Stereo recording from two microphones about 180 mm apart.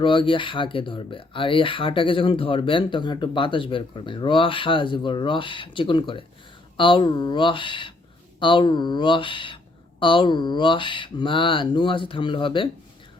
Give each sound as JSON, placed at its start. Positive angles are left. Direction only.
{"t": 0.0, "sound": "speech", "side_deg": 25}